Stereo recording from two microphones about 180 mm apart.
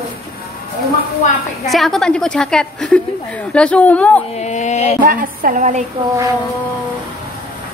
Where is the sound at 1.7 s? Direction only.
Centre (ahead or behind).